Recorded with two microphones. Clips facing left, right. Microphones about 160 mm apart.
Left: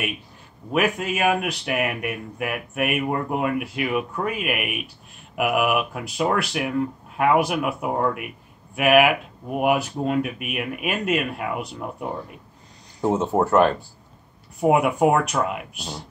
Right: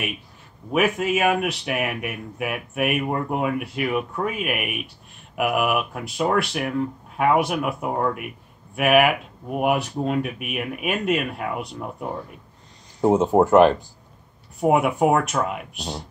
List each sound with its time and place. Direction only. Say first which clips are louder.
0.7 s speech: right 2 dB; centre (ahead or behind)
13.1 s speech: right 4 dB; 15° right (ahead or behind)
14.6 s speech: left 1 dB; centre (ahead or behind)